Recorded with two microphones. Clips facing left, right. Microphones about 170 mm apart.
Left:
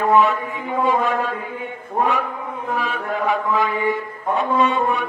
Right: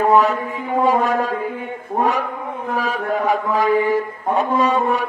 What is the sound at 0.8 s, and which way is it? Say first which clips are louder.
Speech: right 2 dB; 40° right (ahead or behind).